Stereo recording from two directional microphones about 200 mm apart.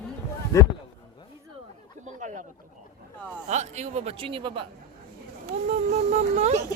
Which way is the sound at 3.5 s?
35° right (ahead or behind).